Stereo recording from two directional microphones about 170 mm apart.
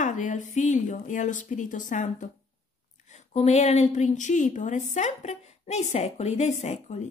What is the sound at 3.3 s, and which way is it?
A woman's voice, 40° left (ahead or behind).